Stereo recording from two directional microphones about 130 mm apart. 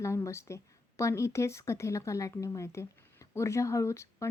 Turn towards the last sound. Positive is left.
turn(degrees=20)  # may be behind; listen again after turning